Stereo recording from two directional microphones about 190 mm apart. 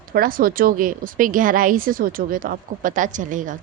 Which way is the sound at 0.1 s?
50° right (ahead or behind).